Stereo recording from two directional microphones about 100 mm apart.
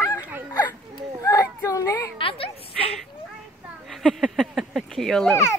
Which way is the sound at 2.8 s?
Centre (ahead or behind).